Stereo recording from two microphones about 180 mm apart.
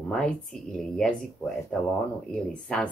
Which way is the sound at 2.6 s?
5° left (ahead or behind).